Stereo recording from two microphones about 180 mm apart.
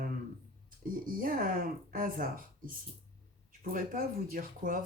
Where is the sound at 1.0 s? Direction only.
50° right (ahead or behind).